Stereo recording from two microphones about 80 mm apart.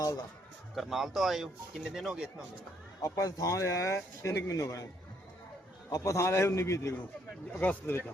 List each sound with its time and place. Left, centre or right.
0.8 s speech: centre
3.0 s speech: left
5.9 s speech: left
7.6 s speech: left